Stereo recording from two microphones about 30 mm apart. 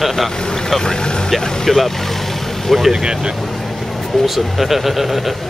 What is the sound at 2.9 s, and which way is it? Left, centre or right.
Speech, right.